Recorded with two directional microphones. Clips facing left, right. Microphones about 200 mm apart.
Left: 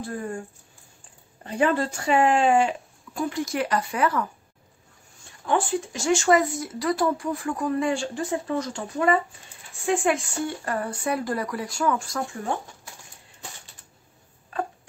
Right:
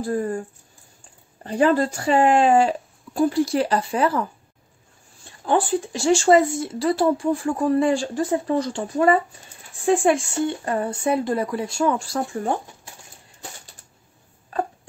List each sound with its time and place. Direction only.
0.0 s speech: 40° right (ahead or behind)
1.4 s speech: 35° right (ahead or behind)